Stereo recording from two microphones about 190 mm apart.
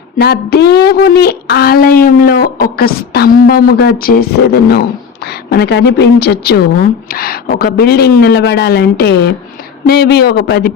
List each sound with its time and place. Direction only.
0.2 s a woman's voice: 55° left (ahead or behind)